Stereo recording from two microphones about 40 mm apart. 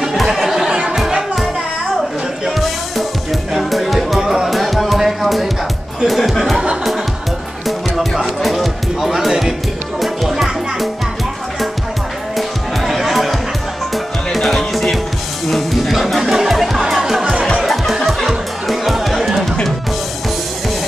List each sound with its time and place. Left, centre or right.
0.1 s a sound: centre
0.7 s music: centre
0.9 s music: centre
2.5 s music: centre
7.6 s music: centre
12.4 s music: centre
17.2 s music: centre
17.6 s music: centre